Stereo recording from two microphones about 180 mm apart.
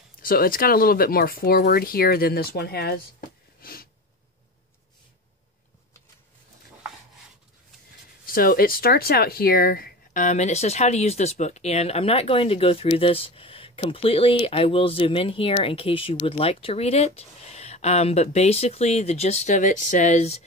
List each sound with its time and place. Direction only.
0.2 s speech: 50° left (ahead or behind)
3.6 s sneeze: 55° left (ahead or behind)
8.3 s speech: 55° left (ahead or behind); by 20.4 s 35° left (ahead or behind)